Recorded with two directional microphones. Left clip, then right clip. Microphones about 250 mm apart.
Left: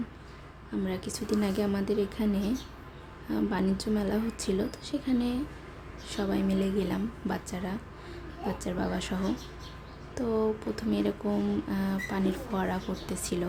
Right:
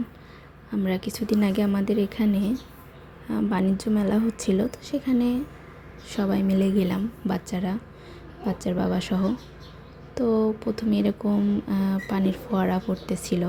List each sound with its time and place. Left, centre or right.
0.9 s speech: centre